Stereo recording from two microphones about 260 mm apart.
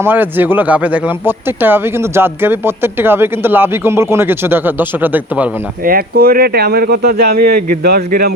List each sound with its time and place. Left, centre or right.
0.0 s speech: centre
5.8 s speech: right